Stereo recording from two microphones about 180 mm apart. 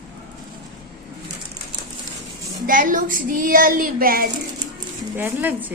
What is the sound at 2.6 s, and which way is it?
Speech, 50° right (ahead or behind).